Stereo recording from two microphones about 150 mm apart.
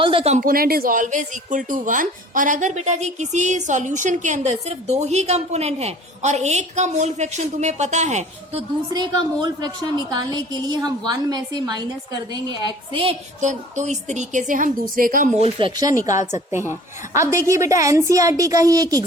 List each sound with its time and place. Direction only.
0.0 s speech: 35° right (ahead or behind)
0.3 s a woman's voice: 75° right (ahead or behind); by 8.6 s 50° right (ahead or behind)
8.9 s a woman's voice: 30° right (ahead or behind)
13.4 s a woman's voice: 55° right (ahead or behind)
15.4 s speech: 40° right (ahead or behind)
17.2 s a woman's voice: 20° right (ahead or behind)